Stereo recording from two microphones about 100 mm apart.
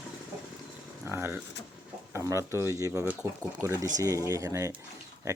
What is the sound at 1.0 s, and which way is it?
Speech, 25° right (ahead or behind).